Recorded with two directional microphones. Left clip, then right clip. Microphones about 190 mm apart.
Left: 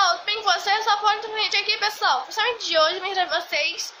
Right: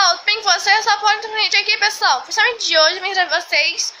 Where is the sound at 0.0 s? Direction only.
Centre (ahead or behind).